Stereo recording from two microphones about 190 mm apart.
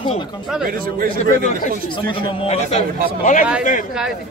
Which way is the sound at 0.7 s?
50° right (ahead or behind).